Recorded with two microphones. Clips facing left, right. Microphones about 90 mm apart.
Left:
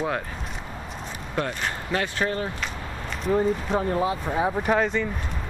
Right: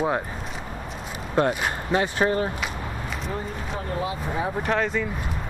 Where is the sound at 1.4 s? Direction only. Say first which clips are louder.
Right 5 dB; 30° right (ahead or behind).